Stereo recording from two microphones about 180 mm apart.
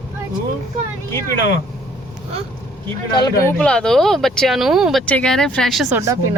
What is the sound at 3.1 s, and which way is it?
Speech, 25° left (ahead or behind).